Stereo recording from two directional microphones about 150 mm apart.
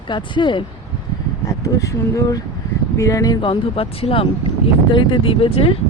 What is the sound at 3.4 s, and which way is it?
Speech, 35° left (ahead or behind).